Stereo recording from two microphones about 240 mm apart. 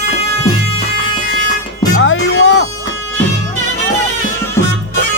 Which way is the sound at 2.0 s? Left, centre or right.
Left.